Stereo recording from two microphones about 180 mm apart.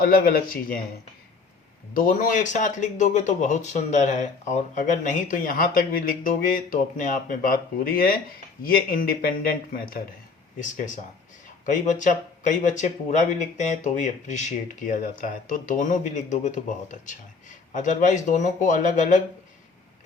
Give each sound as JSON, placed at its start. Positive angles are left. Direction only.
{"t": 0.0, "sound": "speech", "side_deg": 55}
{"t": 1.9, "sound": "speech", "side_deg": 50}